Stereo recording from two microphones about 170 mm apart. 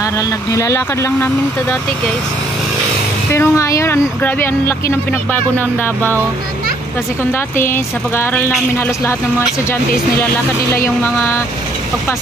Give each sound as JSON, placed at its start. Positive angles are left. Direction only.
{"t": 0.0, "sound": "speech", "side_deg": 20}
{"t": 3.3, "sound": "speech", "side_deg": 15}
{"t": 7.3, "sound": "speech", "side_deg": 15}
{"t": 11.0, "sound": "speech", "side_deg": 15}